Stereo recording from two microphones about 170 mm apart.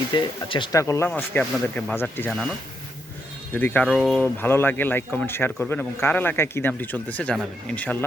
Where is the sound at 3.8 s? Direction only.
Centre (ahead or behind).